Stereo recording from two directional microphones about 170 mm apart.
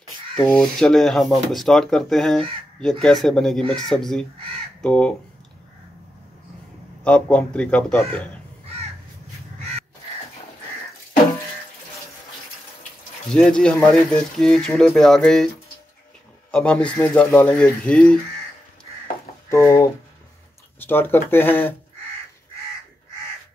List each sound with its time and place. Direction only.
0.5 s speech: 5° left (ahead or behind)
7.1 s speech: 5° left (ahead or behind)
13.3 s speech: 5° left (ahead or behind)
16.5 s speech: 5° left (ahead or behind)
19.5 s speech: 15° left (ahead or behind)